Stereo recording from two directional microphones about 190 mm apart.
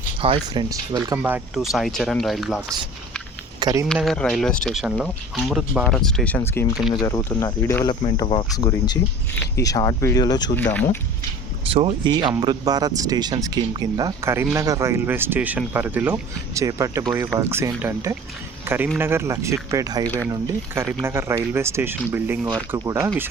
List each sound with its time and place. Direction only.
0.2 s speech: 25° right (ahead or behind)
1.5 s speech: centre (ahead or behind)
3.6 s speech: 20° right (ahead or behind)
3.8 s speech: centre (ahead or behind); by 10.5 s 20° left (ahead or behind)
10.5 s speech: 10° left (ahead or behind)
11.7 s speech: 30° right (ahead or behind); by 23.3 s 10° right (ahead or behind)